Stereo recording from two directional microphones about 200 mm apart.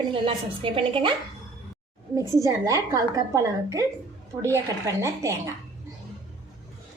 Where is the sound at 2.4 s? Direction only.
15° right (ahead or behind).